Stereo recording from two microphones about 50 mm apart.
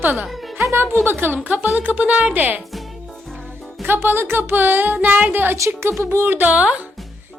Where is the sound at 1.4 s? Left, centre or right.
Right.